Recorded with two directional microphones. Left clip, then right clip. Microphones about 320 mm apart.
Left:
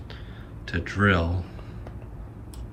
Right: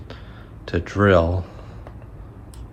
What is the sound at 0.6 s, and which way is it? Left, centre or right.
Speech, centre.